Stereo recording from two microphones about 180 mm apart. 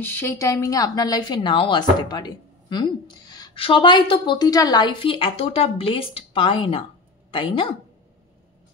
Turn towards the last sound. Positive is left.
turn(degrees=30)  # may be behind; listen again after turning